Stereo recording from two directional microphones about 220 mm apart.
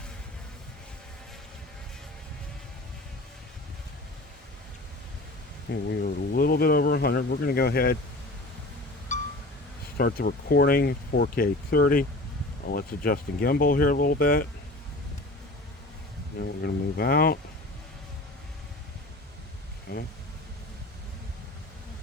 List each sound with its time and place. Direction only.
5.9 s speech: 45° left (ahead or behind)
9.1 s wind chime: 35° left (ahead or behind)
10.0 s speech: 45° left (ahead or behind)
16.4 s speech: 45° left (ahead or behind)
19.9 s speech: 45° left (ahead or behind)